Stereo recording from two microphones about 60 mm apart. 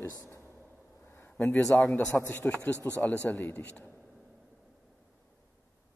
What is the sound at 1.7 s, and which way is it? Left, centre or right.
A woman's voice, left.